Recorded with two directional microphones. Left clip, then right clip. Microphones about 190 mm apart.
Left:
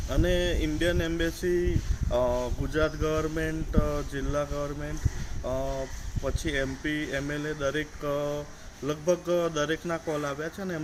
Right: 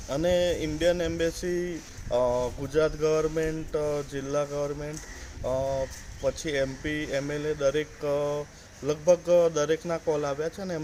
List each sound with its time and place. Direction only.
0.1 s speech: 20° right (ahead or behind)
6.2 s speech: 20° right (ahead or behind)